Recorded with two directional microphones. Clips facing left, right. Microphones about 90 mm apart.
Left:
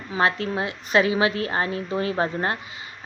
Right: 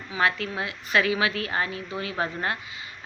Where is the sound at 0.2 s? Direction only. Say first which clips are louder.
Left 3 dB; 30° left (ahead or behind).